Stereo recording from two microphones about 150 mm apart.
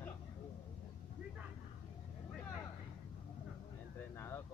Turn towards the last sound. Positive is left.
turn(degrees=15)  # may be behind; listen again after turning